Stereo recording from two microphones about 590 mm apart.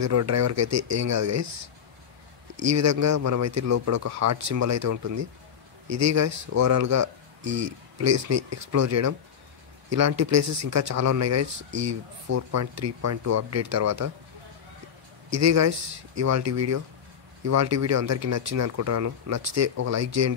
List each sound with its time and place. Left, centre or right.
0.0 s speech: right
2.5 s speech: right
15.2 s speech: right